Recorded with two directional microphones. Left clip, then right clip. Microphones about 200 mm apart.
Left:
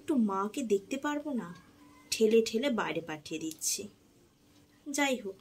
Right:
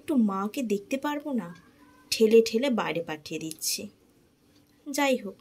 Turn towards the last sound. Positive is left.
turn(degrees=-20)  # may be behind; listen again after turning